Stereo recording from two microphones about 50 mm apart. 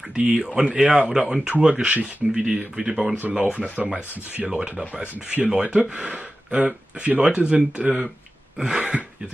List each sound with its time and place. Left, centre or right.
0.1 s speech: centre
1.1 s speech: centre
3.2 s speech: right; by 5.0 s centre
5.1 s speech: right
5.5 s speech: centre